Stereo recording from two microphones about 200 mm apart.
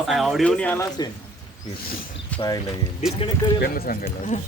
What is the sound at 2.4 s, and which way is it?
Speech, 20° left (ahead or behind).